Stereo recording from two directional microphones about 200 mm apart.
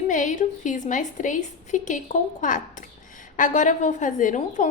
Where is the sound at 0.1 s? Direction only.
40° left (ahead or behind).